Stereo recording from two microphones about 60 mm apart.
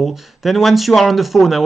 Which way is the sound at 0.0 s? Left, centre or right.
Centre.